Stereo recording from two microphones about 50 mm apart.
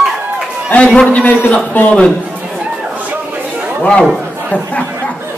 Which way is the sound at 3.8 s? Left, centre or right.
Left.